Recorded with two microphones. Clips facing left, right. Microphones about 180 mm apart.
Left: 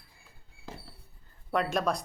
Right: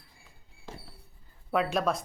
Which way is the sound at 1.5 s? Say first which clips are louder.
Right 1 dB; centre (ahead or behind).